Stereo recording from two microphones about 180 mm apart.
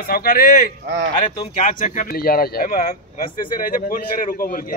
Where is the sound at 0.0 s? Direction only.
55° left (ahead or behind).